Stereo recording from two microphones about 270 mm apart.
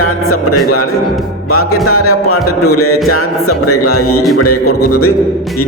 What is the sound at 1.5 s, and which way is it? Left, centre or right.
Music, left.